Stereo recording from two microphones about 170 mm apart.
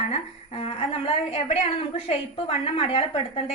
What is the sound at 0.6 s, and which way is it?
A woman's voice, 35° left (ahead or behind).